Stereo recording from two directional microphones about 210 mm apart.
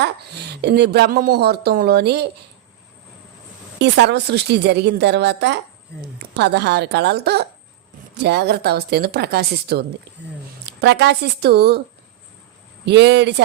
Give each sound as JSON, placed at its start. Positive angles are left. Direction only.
{"t": 0.0, "sound": "speech", "side_deg": -50}
{"t": 3.8, "sound": "speech", "side_deg": -55}
{"t": 12.8, "sound": "speech", "side_deg": -55}